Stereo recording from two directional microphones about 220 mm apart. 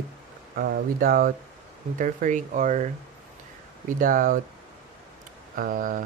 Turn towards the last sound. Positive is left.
turn(degrees=-40)  # may be behind; listen again after turning